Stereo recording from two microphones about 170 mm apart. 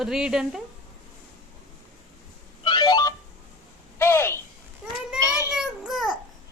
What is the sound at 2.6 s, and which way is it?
Telephone dialing, 25° left (ahead or behind).